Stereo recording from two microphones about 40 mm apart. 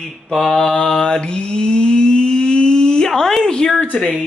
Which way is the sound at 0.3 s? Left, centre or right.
Centre.